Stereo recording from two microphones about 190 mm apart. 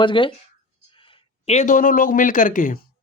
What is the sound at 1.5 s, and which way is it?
Speech, 40° left (ahead or behind).